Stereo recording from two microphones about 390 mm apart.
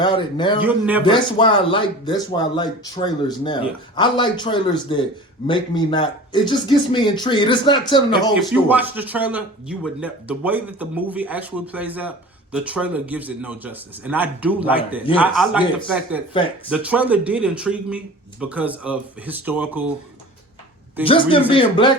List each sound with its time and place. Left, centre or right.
0.0 s speech: centre
0.6 s speech: centre
1.0 s speech: centre
8.4 s speech: centre
15.0 s speech: centre
15.4 s speech: centre
21.0 s speech: centre